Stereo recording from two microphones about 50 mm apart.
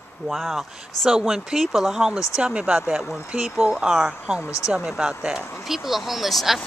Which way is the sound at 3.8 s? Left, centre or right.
Centre.